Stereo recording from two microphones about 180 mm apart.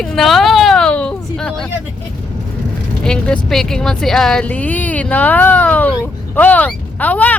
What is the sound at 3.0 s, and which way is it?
Speech, 5° left (ahead or behind).